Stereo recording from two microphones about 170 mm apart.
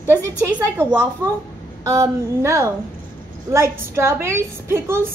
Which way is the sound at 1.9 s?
20° right (ahead or behind).